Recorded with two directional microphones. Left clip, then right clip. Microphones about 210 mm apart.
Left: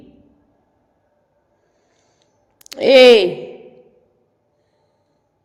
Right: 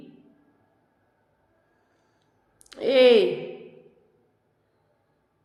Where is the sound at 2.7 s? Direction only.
40° left (ahead or behind).